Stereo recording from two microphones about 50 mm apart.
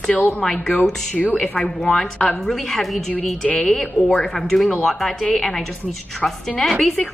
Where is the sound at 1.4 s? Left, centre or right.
Centre.